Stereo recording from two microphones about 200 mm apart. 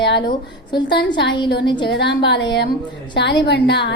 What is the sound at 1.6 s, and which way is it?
Speech, 20° left (ahead or behind).